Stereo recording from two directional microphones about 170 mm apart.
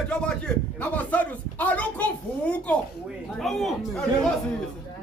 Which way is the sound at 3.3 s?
Centre (ahead or behind).